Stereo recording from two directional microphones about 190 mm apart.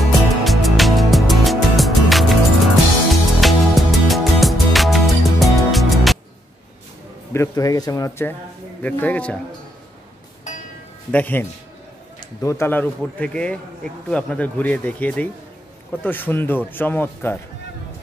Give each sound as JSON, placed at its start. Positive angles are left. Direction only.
{"t": 0.0, "sound": "music", "side_deg": 0}
{"t": 7.3, "sound": "speech", "side_deg": 20}
{"t": 11.1, "sound": "speech", "side_deg": 10}